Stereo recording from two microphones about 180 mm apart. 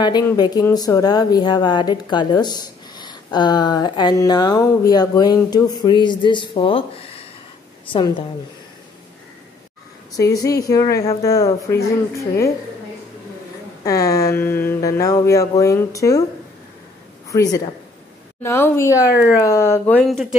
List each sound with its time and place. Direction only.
0.0 s a woman's voice: 25° left (ahead or behind)
10.1 s a woman's voice: 20° left (ahead or behind)
13.8 s speech: 20° left (ahead or behind)
17.3 s speech: 20° left (ahead or behind)
20.0 s speech: centre (ahead or behind)